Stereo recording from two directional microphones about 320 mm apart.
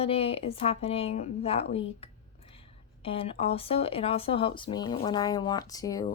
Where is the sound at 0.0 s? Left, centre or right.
Centre.